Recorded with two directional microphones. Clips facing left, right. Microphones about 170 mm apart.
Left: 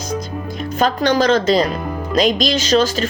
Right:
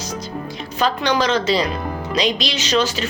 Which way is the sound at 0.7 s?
50° left (ahead or behind).